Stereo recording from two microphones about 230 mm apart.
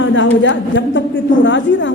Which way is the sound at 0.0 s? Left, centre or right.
Left.